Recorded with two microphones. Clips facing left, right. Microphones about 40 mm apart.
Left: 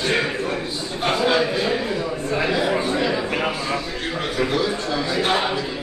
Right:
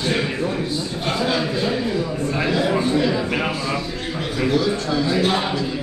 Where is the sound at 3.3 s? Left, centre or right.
Centre.